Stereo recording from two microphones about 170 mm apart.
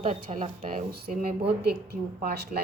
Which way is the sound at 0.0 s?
45° right (ahead or behind).